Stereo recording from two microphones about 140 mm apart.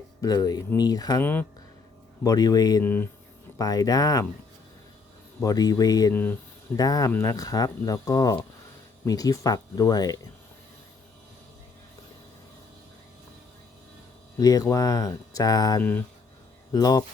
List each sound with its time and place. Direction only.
0.2 s speech: 30° left (ahead or behind)
1.2 s speech: 15° left (ahead or behind)
2.2 s speech: 25° left (ahead or behind)
2.8 s speech: 15° left (ahead or behind)
3.6 s speech: 25° left (ahead or behind)
5.4 s speech: 25° left (ahead or behind)
14.3 s speech: 25° left (ahead or behind)
15.8 s speech: 10° left (ahead or behind)
16.7 s speech: 25° left (ahead or behind)